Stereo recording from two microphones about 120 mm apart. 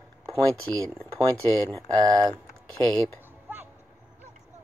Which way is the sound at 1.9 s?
35° right (ahead or behind).